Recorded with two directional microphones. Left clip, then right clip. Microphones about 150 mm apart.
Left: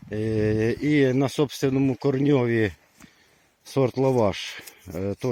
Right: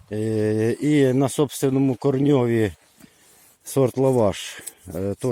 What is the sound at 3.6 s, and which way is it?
Speech, 20° right (ahead or behind).